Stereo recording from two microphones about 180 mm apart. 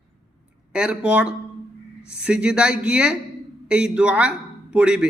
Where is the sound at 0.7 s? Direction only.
5° right (ahead or behind).